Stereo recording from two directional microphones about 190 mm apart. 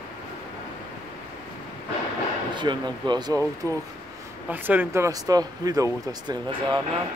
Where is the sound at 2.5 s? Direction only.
25° right (ahead or behind).